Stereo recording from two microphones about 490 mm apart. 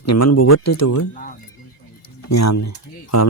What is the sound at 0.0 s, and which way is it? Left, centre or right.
Speech, left.